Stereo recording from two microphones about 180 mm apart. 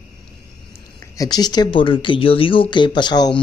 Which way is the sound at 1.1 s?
20° left (ahead or behind).